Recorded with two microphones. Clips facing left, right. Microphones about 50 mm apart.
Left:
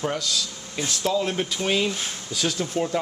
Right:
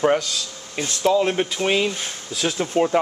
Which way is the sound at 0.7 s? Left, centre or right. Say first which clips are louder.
Right 5 dB; right.